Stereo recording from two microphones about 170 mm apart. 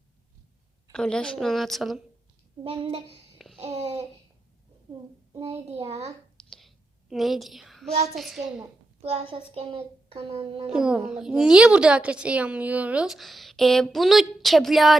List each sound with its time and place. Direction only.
0.9 s a woman's voice: 5° left (ahead or behind)
3.3 s babbling: centre (ahead or behind)
3.6 s babbling: 40° right (ahead or behind)
6.5 s a sound: centre (ahead or behind)
8.1 s a woman's voice: centre (ahead or behind)
9.0 s a child's voice: 35° right (ahead or behind)
10.7 s a woman's voice: 5° right (ahead or behind)